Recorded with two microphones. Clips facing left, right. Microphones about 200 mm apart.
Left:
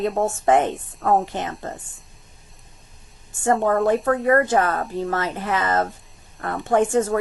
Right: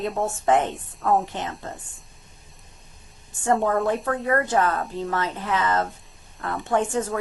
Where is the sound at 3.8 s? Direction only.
Centre (ahead or behind).